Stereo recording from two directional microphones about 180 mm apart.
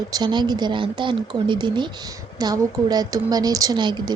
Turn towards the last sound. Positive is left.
turn(degrees=-25)  # may be behind; listen again after turning